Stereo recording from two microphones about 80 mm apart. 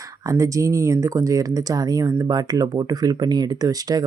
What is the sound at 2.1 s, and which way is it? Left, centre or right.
Speech, right.